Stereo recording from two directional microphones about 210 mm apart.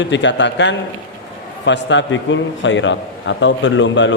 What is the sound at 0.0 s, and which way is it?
A man's voice, 60° left (ahead or behind).